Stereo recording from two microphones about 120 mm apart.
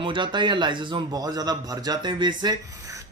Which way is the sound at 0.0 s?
40° right (ahead or behind).